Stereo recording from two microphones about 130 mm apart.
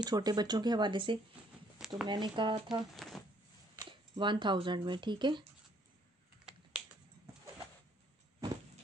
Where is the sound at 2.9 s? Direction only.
Centre (ahead or behind).